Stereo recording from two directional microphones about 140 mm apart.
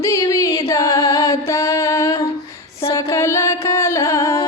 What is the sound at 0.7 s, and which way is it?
Music, 20° left (ahead or behind).